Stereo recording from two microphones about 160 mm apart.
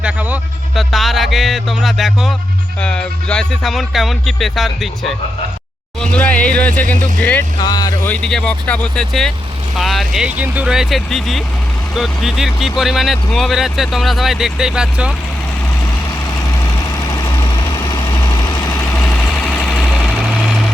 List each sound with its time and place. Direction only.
0.0 s a sound: 10° right (ahead or behind)
0.8 s speech: centre (ahead or behind)
7.6 s speech: 25° left (ahead or behind)
8.0 s speech: 5° left (ahead or behind)
17.1 s vehicle: 20° left (ahead or behind); by 20.6 s centre (ahead or behind)